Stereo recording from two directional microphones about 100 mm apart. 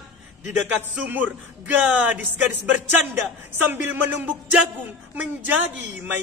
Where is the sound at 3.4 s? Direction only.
20° right (ahead or behind).